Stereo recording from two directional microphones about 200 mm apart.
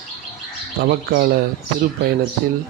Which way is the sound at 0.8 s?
50° right (ahead or behind).